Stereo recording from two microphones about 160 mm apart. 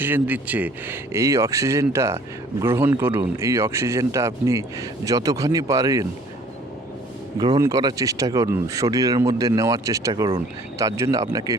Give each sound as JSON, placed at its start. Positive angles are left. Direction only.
{"t": 0.0, "sound": "speech", "side_deg": -10}
{"t": 7.3, "sound": "speech", "side_deg": -25}